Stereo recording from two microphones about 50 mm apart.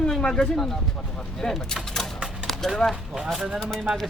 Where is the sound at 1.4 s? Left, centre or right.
Centre.